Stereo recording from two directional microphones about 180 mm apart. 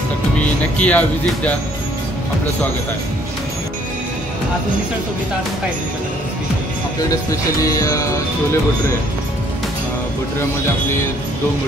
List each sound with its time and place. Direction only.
0.4 s speech: 10° left (ahead or behind)
7.1 s speech: 20° left (ahead or behind)